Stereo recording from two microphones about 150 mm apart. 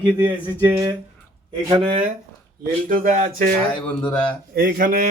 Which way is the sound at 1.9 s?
45° right (ahead or behind).